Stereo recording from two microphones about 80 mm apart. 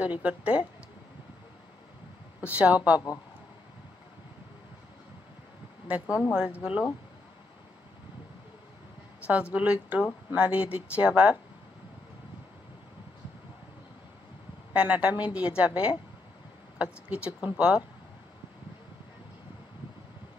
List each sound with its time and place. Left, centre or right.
0.0 s a woman's voice: centre
2.4 s speech: centre
5.9 s a woman's voice: centre
9.3 s a woman's voice: centre
14.7 s a woman's voice: centre